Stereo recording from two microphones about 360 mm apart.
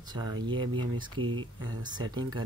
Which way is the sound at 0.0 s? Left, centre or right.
Centre.